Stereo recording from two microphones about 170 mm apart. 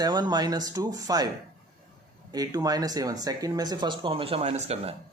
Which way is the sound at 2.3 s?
20° right (ahead or behind).